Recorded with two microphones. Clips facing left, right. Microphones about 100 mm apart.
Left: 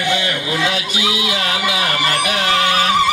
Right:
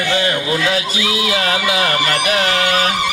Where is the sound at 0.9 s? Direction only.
20° left (ahead or behind).